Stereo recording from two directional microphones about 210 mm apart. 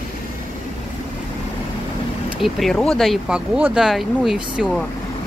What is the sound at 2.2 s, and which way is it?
Speech, centre (ahead or behind).